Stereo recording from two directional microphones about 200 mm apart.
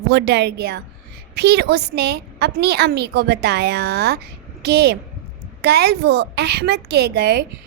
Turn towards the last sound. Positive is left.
turn(degrees=-55)  # may be behind; listen again after turning